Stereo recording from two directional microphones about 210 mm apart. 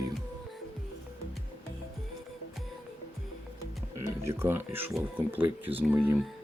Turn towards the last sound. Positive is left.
turn(degrees=-5)  # may be behind; listen again after turning